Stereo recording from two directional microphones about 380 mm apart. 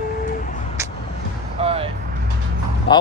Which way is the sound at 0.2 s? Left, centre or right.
Left.